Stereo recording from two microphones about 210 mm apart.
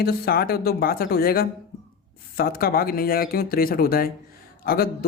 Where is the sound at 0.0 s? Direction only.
45° left (ahead or behind).